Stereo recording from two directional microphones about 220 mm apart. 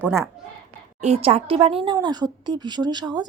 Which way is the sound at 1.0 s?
30° right (ahead or behind).